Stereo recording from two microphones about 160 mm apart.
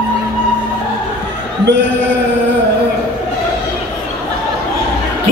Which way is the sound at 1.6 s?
90° right.